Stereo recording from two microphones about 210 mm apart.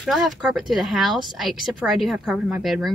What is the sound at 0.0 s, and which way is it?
Speech, centre (ahead or behind).